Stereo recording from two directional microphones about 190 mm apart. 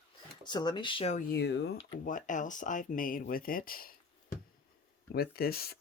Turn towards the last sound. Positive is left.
turn(degrees=55)  # may be behind; listen again after turning